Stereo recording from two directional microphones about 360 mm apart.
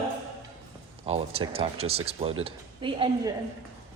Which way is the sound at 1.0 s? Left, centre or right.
Centre.